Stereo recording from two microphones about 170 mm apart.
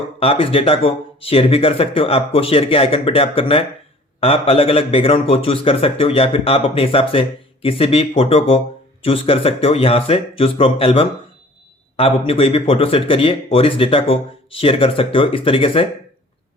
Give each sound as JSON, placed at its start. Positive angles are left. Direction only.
{"t": 0.2, "sound": "a man's voice", "side_deg": 35}